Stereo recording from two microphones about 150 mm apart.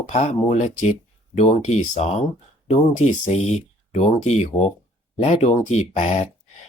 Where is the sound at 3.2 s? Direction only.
45° left (ahead or behind).